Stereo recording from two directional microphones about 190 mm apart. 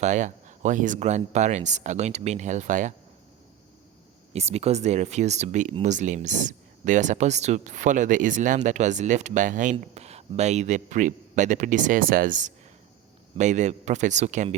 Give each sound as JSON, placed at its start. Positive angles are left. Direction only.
{"t": 0.0, "sound": "speech", "side_deg": -40}
{"t": 4.3, "sound": "speech", "side_deg": -35}